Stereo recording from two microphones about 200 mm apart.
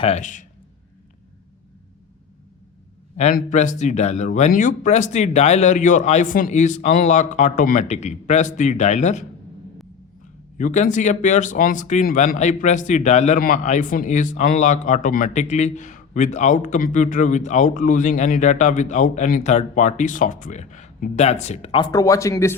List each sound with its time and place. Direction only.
0.0 s speech: 35° left (ahead or behind)
3.3 s speech: 40° left (ahead or behind)
10.6 s speech: 40° left (ahead or behind); by 22.5 s 15° left (ahead or behind)